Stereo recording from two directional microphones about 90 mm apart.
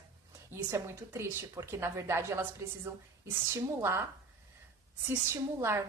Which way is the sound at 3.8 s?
30° right (ahead or behind).